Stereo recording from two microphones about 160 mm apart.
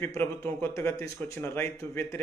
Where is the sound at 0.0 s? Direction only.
15° left (ahead or behind).